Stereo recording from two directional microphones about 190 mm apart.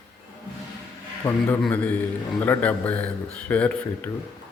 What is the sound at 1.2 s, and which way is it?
A man's voice, 15° left (ahead or behind).